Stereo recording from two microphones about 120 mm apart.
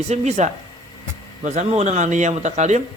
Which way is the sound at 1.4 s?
85° right.